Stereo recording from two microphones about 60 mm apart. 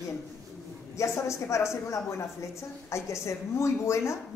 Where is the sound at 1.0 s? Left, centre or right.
Left.